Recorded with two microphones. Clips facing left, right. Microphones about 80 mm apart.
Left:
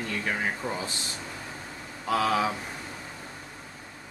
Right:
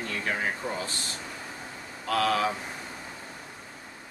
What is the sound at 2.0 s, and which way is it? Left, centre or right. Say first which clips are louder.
Speech: left 1 dB; centre.